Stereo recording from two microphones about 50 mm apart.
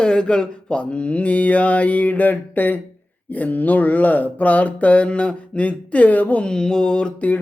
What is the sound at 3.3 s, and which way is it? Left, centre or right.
Speech, left.